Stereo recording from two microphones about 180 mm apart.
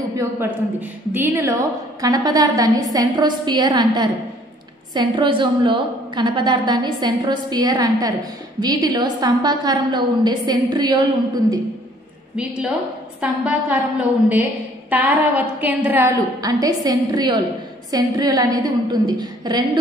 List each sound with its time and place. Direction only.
0.1 s a woman's voice: 15° right (ahead or behind)
12.4 s a woman's voice: 5° right (ahead or behind)
16.3 s a woman's voice: 20° right (ahead or behind)